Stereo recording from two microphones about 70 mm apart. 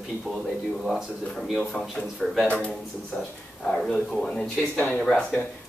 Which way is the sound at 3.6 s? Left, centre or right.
Centre.